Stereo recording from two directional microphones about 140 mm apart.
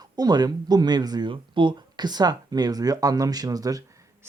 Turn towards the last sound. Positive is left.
turn(degrees=-25)  # may be behind; listen again after turning